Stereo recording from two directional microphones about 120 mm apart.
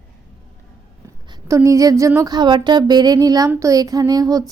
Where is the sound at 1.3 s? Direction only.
25° right (ahead or behind).